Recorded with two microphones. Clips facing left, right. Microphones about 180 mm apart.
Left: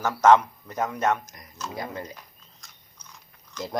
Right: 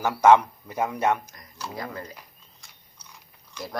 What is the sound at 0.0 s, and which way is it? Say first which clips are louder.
A man's voice: right 1 dB; 10° right (ahead or behind).